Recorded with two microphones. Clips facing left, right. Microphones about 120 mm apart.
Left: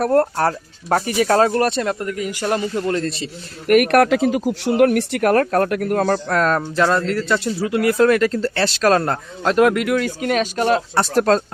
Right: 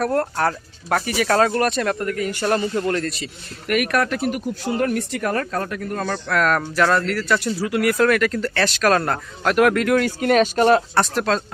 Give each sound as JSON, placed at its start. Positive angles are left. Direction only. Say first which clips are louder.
{"t": 0.0, "sound": "speech", "louder": "left 4 dB", "side_deg": 30}
{"t": 3.0, "sound": "speech", "louder": "left 3 dB", "side_deg": 30}
{"t": 3.7, "sound": "speech", "louder": "left 7 dB", "side_deg": 55}
{"t": 6.0, "sound": "speech", "louder": "left 1 dB", "side_deg": 40}
{"t": 6.6, "sound": "speech", "louder": "left 1 dB", "side_deg": 25}
{"t": 9.7, "sound": "speech", "louder": "right 1 dB", "side_deg": 5}
{"t": 10.3, "sound": "speech", "louder": "right 3 dB", "side_deg": -45}
{"t": 11.1, "sound": "speech", "louder": "left 5 dB", "side_deg": 40}